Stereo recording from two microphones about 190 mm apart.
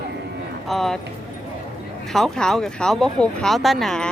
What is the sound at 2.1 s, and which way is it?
Speech, centre (ahead or behind).